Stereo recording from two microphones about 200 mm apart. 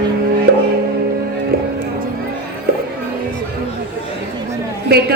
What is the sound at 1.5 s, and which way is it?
Music, 50° right (ahead or behind).